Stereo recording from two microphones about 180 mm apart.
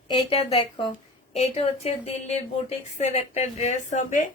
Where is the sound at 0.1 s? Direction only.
35° left (ahead or behind).